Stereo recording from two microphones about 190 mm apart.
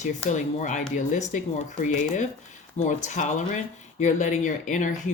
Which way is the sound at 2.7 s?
40° left (ahead or behind).